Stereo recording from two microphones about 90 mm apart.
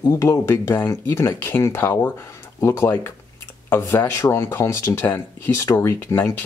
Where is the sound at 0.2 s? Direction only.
30° left (ahead or behind).